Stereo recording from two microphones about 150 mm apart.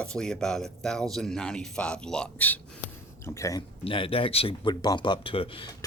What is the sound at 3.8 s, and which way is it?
Speech, 35° left (ahead or behind).